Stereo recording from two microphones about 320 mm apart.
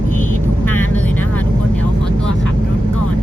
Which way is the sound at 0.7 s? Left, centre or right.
Centre.